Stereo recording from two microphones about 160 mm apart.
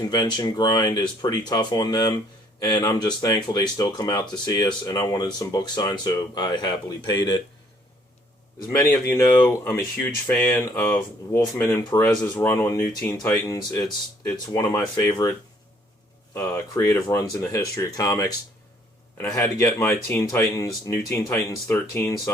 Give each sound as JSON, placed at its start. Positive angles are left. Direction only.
{"t": 0.1, "sound": "speech", "side_deg": 25}
{"t": 8.7, "sound": "speech", "side_deg": 20}